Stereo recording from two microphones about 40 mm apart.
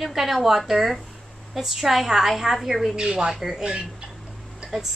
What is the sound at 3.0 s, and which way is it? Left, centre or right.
Speech, centre.